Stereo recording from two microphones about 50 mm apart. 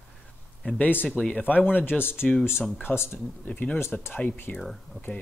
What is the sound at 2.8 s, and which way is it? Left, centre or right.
Speech, left.